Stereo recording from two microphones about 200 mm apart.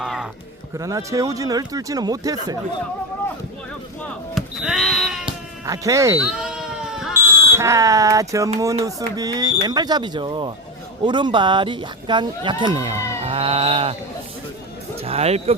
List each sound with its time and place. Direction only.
0.0 s music: centre (ahead or behind)
0.8 s speech: 15° right (ahead or behind)
4.0 s basketball bounce: centre (ahead or behind)
5.2 s speech: 15° right (ahead or behind)
6.3 s smoke detector: 5° right (ahead or behind)
8.5 s speech: 15° right (ahead or behind)
15.0 s speech: 30° right (ahead or behind)